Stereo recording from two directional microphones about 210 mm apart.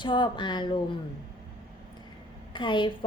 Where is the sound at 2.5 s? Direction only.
20° left (ahead or behind).